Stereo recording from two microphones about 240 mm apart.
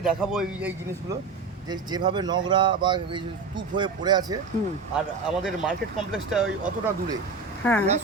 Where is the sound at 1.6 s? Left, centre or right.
Centre.